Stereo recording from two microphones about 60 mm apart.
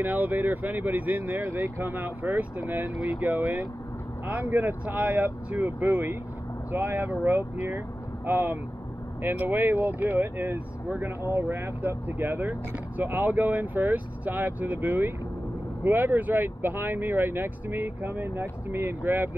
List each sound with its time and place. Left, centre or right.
0.0 s speech: right